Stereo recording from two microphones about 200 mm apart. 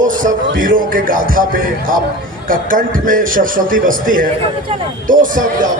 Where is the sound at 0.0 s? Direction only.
40° right (ahead or behind).